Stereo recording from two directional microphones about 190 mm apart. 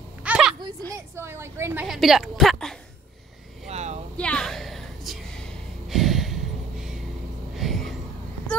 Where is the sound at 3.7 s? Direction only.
35° right (ahead or behind).